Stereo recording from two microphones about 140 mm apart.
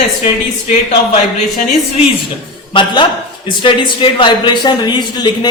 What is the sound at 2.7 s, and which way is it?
A man's voice, 35° left (ahead or behind).